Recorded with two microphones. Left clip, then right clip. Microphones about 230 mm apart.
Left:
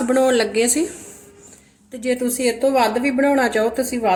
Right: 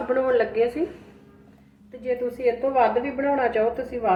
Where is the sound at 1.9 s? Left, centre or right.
Left.